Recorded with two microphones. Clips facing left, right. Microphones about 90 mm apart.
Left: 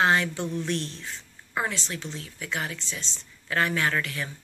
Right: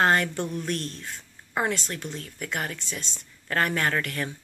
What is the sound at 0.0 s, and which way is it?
Speech, 50° right (ahead or behind).